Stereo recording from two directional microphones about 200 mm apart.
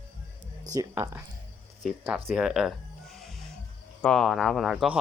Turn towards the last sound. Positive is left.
turn(degrees=0)  # may be behind; listen again after turning